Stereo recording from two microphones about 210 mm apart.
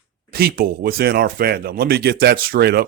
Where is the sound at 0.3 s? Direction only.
45° right (ahead or behind).